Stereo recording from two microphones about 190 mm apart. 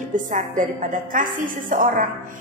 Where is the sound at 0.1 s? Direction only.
45° right (ahead or behind).